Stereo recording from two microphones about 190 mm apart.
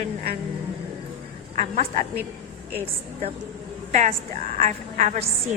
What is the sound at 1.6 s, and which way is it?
Speech, 40° right (ahead or behind).